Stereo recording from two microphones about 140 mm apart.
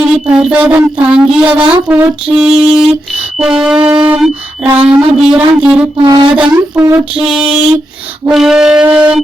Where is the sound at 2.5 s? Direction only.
45° right (ahead or behind).